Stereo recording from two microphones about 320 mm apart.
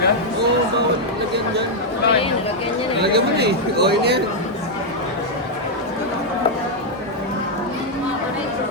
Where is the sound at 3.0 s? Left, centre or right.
Right.